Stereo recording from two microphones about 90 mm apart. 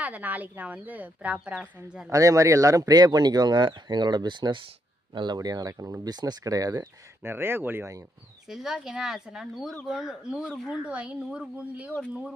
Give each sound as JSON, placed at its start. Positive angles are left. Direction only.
{"t": 0.0, "sound": "a woman's voice", "side_deg": -15}
{"t": 2.0, "sound": "speech", "side_deg": -35}
{"t": 6.0, "sound": "speech", "side_deg": -50}
{"t": 7.2, "sound": "speech", "side_deg": -25}
{"t": 8.5, "sound": "a woman's voice", "side_deg": -5}
{"t": 10.5, "sound": "speech", "side_deg": 5}
{"t": 10.8, "sound": "a woman's voice", "side_deg": -10}